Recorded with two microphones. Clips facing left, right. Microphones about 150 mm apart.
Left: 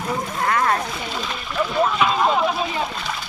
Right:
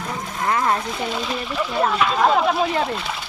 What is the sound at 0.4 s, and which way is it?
Splash, 20° right (ahead or behind).